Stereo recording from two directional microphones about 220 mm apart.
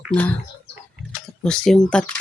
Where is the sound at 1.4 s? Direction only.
5° left (ahead or behind).